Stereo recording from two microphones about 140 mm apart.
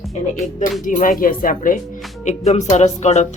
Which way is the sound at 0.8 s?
70° left (ahead or behind).